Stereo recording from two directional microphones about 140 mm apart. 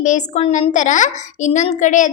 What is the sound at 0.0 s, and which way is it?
A child's voice, 60° left (ahead or behind).